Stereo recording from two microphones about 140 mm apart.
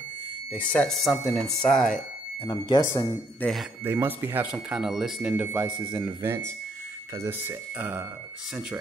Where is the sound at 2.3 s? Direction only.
30° left (ahead or behind).